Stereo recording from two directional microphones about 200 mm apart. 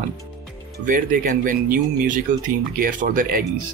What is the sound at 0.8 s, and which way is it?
Speech, 40° right (ahead or behind).